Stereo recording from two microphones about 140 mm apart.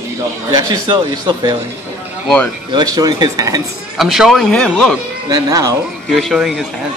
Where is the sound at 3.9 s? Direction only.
Centre (ahead or behind).